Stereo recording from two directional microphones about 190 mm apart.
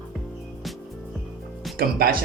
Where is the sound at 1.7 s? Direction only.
50° right (ahead or behind).